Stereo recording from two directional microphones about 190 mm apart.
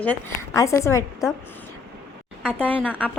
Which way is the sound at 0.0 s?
10° left (ahead or behind).